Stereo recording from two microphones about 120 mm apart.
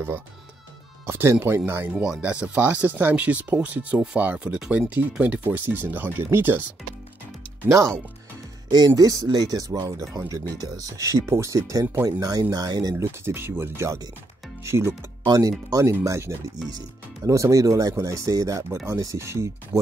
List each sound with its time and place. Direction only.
1.0 s speech: 20° right (ahead or behind)
7.6 s speech: 25° right (ahead or behind)
8.7 s speech: 35° right (ahead or behind)
12.9 s speech: 20° right (ahead or behind)
15.2 s speech: 30° right (ahead or behind)